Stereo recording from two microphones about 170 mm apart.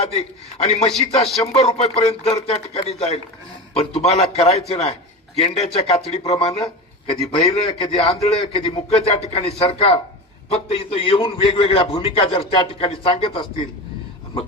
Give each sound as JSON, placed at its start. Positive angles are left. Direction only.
{"t": 0.0, "sound": "a man's voice", "side_deg": 40}